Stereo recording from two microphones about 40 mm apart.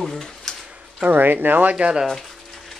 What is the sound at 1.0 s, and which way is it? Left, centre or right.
Speech, right.